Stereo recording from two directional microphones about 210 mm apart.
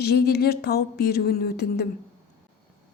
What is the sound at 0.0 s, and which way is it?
Speech, 50° left (ahead or behind).